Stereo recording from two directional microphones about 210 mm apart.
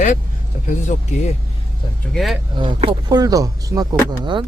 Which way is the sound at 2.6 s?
25° right (ahead or behind).